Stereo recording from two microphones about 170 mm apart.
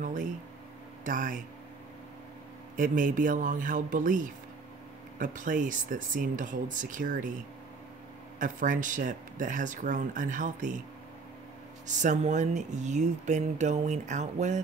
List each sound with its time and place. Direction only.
0.0 s a sound: 50° right (ahead or behind)
1.0 s speech: 50° right (ahead or behind)
2.7 s speech: 50° right (ahead or behind)
8.4 s speech: 50° right (ahead or behind)
12.0 s speech: 45° right (ahead or behind)